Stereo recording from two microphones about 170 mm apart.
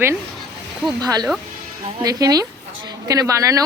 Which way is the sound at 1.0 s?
25° right (ahead or behind).